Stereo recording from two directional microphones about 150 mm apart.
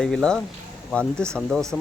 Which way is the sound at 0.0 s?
5° left (ahead or behind).